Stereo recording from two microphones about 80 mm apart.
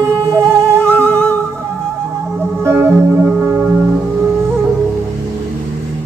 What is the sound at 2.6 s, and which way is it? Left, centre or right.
Music, right.